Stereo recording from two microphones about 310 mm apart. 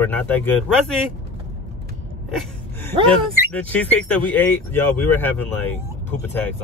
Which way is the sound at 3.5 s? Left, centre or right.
Centre.